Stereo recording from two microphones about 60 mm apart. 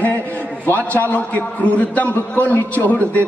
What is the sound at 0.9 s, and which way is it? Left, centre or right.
A man's voice, left.